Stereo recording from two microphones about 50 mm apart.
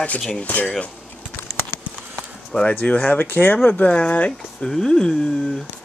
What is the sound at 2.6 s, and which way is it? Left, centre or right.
Speech, left.